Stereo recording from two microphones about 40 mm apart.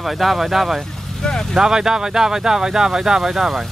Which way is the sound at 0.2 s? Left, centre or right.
Centre.